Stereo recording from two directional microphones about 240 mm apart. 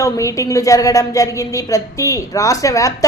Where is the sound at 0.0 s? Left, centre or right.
Centre.